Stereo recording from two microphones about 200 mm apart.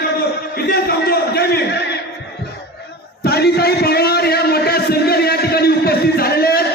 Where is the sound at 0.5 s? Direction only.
50° left (ahead or behind).